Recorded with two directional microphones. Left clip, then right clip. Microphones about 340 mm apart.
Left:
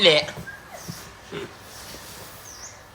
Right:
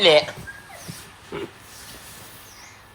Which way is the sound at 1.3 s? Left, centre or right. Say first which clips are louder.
Right 2 dB; centre.